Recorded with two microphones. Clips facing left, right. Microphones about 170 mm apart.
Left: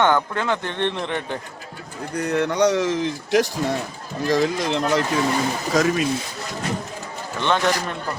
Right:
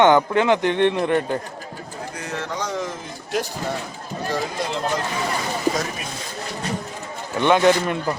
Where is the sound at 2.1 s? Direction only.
65° left (ahead or behind); by 3.4 s 90° left.